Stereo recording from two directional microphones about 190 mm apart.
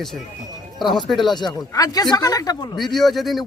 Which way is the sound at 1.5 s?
20° left (ahead or behind).